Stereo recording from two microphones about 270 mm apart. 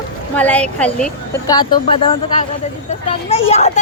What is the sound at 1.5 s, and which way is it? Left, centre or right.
A child's voice, centre.